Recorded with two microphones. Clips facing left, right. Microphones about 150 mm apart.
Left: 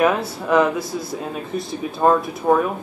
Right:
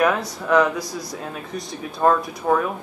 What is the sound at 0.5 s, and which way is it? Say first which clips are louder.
Speech: left 1 dB; 5° left (ahead or behind).